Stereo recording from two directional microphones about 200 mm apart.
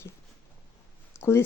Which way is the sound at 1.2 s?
15° left (ahead or behind).